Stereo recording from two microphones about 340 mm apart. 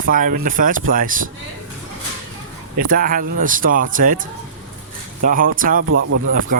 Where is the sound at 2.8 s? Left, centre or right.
Right.